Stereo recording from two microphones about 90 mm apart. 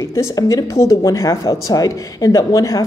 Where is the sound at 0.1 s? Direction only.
35° left (ahead or behind).